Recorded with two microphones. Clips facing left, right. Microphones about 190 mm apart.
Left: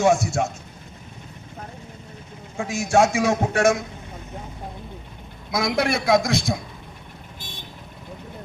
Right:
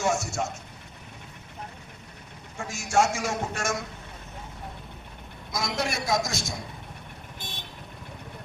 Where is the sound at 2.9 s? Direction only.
60° left (ahead or behind).